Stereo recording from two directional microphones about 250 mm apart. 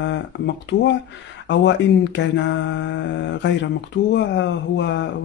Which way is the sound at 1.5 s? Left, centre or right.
Left.